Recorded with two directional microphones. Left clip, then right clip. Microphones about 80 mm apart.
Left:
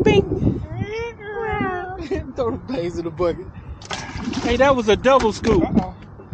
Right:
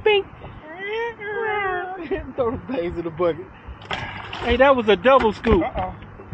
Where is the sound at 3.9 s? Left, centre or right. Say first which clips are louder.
Even; left.